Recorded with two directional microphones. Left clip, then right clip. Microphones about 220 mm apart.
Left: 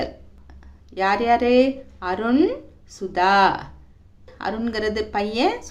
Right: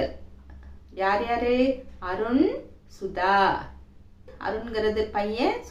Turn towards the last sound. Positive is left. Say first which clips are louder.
# left 3 dB
turn(degrees=50)  # may be behind; listen again after turning